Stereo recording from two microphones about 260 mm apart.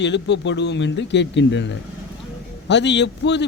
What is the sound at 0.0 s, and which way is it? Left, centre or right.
Speech, left.